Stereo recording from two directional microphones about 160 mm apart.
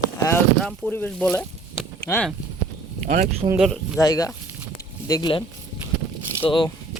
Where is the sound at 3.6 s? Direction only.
Centre (ahead or behind).